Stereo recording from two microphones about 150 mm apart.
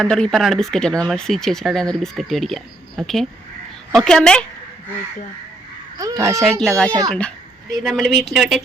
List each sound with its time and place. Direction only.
0.0 s speech: 5° left (ahead or behind)
6.0 s speech: 20° right (ahead or behind)
6.2 s speech: centre (ahead or behind)